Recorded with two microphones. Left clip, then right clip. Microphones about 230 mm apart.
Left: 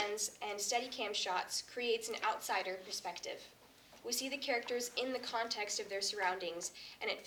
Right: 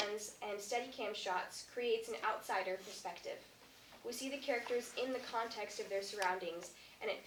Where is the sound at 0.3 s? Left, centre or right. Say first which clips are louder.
Left 3 dB; left.